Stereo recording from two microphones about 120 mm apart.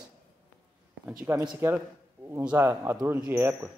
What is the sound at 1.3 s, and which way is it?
Speech, 20° right (ahead or behind).